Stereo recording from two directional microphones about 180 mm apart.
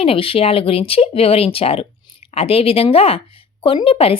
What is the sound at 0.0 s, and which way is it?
Speech, 30° left (ahead or behind).